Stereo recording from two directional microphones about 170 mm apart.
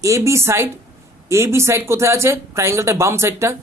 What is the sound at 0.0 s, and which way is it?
Speech, 20° right (ahead or behind).